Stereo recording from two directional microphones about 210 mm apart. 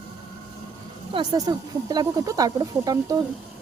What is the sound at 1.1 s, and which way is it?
Speech, 20° right (ahead or behind).